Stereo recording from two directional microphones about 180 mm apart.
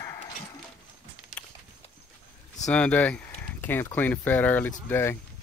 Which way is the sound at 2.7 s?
5° left (ahead or behind).